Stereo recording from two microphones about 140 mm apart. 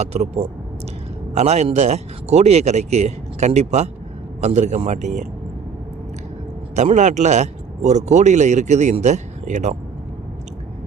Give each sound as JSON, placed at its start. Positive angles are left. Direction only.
{"t": 0.0, "sound": "speech", "side_deg": -50}
{"t": 6.7, "sound": "speech", "side_deg": -55}